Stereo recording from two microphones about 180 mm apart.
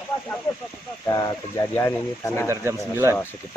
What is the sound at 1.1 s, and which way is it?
Speech, 20° left (ahead or behind).